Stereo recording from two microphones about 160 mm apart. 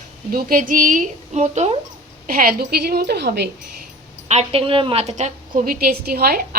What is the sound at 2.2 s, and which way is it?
A woman's voice, 65° right (ahead or behind).